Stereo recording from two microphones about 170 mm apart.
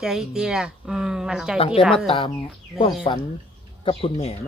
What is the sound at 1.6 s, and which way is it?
Speech, 35° left (ahead or behind).